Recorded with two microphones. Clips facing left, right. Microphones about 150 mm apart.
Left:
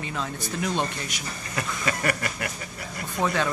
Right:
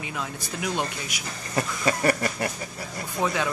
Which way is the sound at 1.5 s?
30° right (ahead or behind).